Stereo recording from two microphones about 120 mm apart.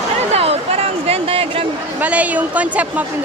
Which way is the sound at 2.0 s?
10° right (ahead or behind).